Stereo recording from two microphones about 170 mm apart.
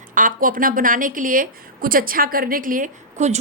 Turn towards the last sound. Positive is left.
turn(degrees=-45)  # may be behind; listen again after turning